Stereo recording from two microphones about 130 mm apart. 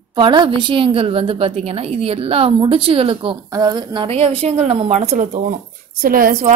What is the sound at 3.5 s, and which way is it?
Speech, 30° right (ahead or behind).